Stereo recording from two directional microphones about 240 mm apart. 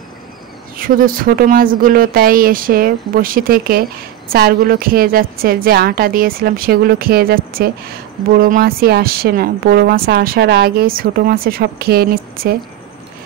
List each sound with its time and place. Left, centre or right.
0.7 s speech: right